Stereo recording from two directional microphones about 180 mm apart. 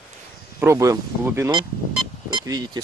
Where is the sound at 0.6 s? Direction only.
15° right (ahead or behind).